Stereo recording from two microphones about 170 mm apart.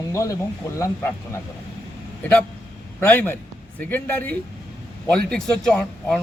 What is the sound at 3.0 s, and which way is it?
A man's voice, 10° left (ahead or behind).